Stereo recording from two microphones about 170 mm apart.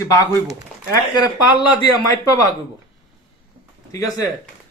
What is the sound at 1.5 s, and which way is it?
Speech, 25° left (ahead or behind).